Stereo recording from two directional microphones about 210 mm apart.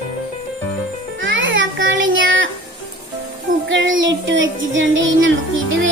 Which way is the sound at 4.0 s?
60° right (ahead or behind).